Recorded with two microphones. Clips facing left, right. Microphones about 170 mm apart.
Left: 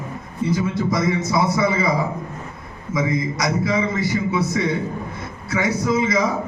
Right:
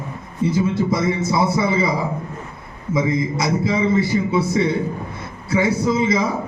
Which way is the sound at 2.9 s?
30° right (ahead or behind).